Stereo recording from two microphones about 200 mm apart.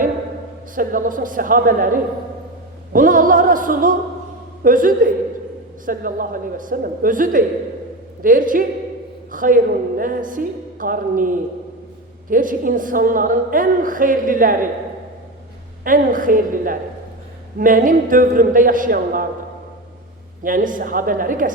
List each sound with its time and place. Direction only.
0.8 s a woman's voice: 45° right (ahead or behind)
15.8 s a woman's voice: 45° right (ahead or behind)
20.4 s a woman's voice: 45° right (ahead or behind)